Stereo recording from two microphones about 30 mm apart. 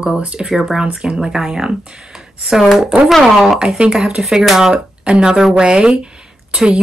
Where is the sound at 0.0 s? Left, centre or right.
Right.